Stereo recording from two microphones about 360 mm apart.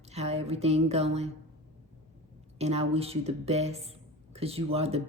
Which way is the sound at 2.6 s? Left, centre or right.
Centre.